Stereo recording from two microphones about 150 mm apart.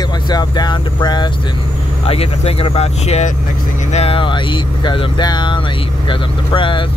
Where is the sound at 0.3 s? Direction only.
30° left (ahead or behind).